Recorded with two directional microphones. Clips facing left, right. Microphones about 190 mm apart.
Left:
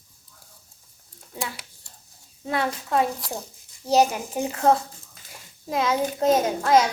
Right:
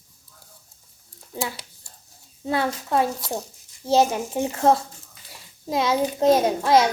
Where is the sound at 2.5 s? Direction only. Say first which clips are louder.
Right 2 dB; 30° right (ahead or behind).